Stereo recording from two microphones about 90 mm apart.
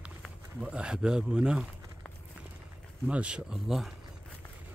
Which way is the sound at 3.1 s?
15° right (ahead or behind).